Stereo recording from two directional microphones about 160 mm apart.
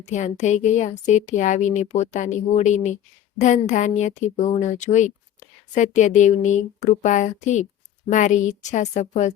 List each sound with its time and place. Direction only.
0.0 s speech: 45° left (ahead or behind)